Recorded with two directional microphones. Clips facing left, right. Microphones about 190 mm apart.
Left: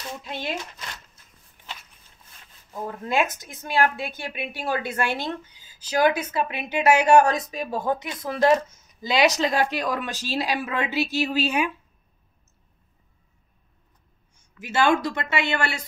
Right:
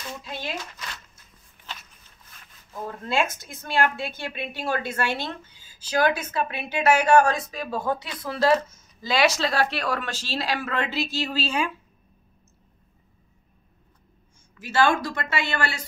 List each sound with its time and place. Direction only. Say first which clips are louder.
2.7 s a woman's voice: left 1 dB; 15° left (ahead or behind)
14.6 s speech: left 1 dB; 20° left (ahead or behind)